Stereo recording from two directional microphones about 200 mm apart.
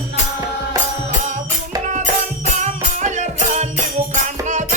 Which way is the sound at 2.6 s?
35° right (ahead or behind).